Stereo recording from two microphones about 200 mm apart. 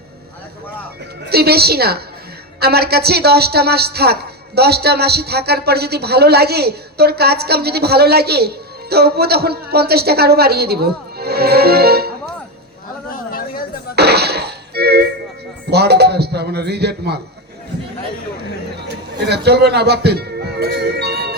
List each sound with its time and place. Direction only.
1.3 s a woman's voice: 50° right (ahead or behind)
13.1 s a sound: 45° left (ahead or behind)
13.9 s music: 55° right (ahead or behind)
15.7 s speech: 55° right (ahead or behind)
18.9 s a man's voice: 55° right (ahead or behind)